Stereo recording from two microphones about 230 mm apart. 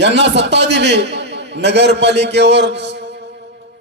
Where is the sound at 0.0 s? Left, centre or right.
Right.